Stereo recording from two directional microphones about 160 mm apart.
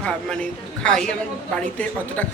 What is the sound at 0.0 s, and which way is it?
A woman's voice, 5° left (ahead or behind).